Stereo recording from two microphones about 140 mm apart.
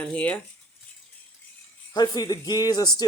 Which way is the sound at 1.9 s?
30° left (ahead or behind).